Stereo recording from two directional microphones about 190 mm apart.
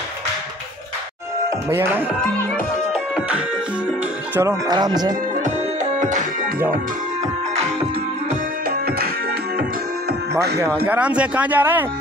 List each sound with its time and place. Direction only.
1.7 s speech: 10° right (ahead or behind)
2.9 s music: 5° right (ahead or behind)
4.4 s speech: 20° right (ahead or behind)
5.9 s music: 40° right (ahead or behind)
8.6 s music: 55° right (ahead or behind)
10.9 s speech: 5° right (ahead or behind)